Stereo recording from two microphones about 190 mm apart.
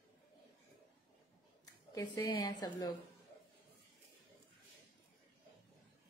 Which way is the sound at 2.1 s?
20° left (ahead or behind).